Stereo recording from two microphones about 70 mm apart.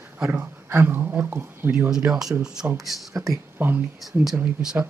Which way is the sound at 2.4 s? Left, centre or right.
Centre.